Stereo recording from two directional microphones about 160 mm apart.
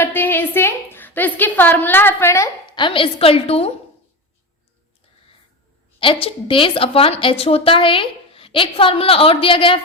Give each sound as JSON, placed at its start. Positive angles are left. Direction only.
{"t": 0.0, "sound": "a woman's voice", "side_deg": 10}
{"t": 6.0, "sound": "a woman's voice", "side_deg": 35}